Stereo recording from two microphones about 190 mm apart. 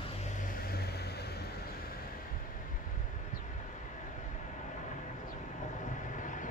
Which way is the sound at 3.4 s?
40° left (ahead or behind).